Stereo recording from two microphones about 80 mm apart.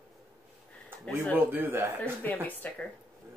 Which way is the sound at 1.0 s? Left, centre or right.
Centre.